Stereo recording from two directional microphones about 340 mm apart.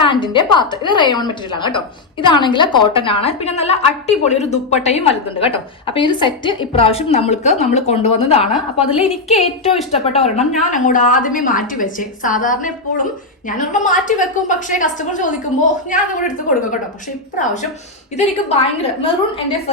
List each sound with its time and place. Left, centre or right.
0.0 s a woman's voice: centre